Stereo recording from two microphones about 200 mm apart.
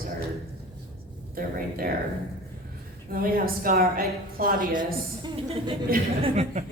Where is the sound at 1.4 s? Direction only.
45° right (ahead or behind).